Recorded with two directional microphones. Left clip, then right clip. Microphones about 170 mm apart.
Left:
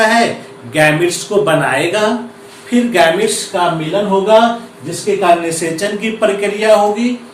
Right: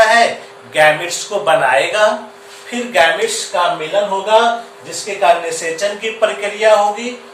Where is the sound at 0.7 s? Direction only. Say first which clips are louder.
Even; 5° left (ahead or behind).